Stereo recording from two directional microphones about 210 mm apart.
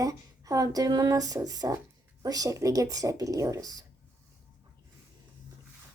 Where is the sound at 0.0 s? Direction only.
15° right (ahead or behind).